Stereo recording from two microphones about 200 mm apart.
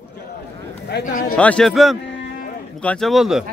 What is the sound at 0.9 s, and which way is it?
Speech, 60° left (ahead or behind).